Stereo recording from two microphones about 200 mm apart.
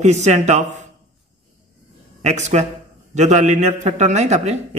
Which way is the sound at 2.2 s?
35° right (ahead or behind).